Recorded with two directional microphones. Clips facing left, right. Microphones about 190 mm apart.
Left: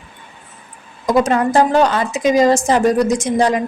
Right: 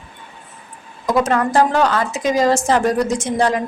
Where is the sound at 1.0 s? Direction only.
15° left (ahead or behind).